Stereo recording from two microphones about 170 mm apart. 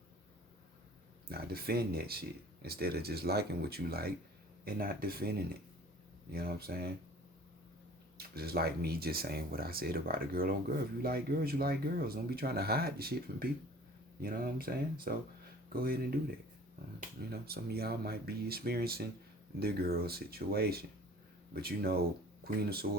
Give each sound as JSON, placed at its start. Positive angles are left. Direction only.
{"t": 1.3, "sound": "speech", "side_deg": -65}
{"t": 6.3, "sound": "speech", "side_deg": -65}
{"t": 8.2, "sound": "speech", "side_deg": -65}
{"t": 17.3, "sound": "speech", "side_deg": -65}